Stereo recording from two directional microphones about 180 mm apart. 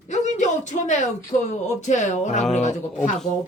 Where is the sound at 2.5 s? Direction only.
40° left (ahead or behind).